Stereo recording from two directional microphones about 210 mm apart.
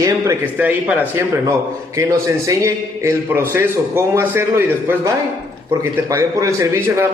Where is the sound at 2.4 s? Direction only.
15° right (ahead or behind).